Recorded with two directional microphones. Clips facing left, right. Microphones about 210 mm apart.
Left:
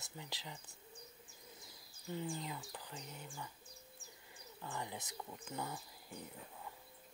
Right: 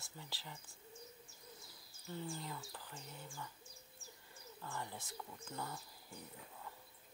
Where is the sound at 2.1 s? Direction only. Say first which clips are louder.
Left 3 dB; 15° left (ahead or behind).